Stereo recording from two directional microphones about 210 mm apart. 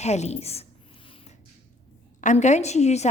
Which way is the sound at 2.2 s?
35° left (ahead or behind).